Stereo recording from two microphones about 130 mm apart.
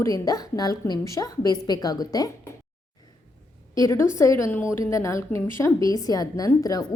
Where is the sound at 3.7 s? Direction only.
25° left (ahead or behind).